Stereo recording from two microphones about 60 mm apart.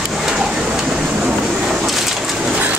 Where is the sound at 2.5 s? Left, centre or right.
Right.